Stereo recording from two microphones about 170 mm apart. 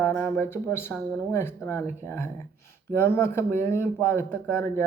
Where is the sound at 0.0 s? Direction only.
15° left (ahead or behind).